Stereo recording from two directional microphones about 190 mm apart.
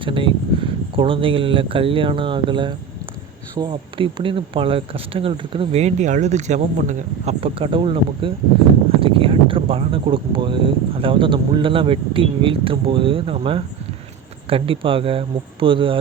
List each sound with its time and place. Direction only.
0.0 s speech: 25° right (ahead or behind)